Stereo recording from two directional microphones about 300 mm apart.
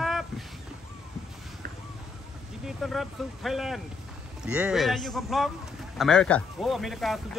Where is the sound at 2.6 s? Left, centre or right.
Centre.